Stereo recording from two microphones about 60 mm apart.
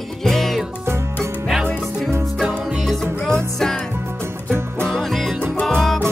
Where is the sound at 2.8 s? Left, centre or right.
Centre.